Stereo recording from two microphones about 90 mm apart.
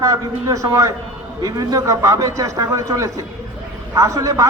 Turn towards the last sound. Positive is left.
turn(degrees=-40)  # may be behind; listen again after turning